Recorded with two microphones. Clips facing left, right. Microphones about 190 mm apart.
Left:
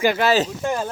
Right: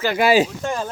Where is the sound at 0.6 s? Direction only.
10° left (ahead or behind).